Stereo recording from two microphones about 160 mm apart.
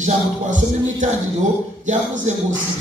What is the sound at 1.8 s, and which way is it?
Speech, 50° right (ahead or behind).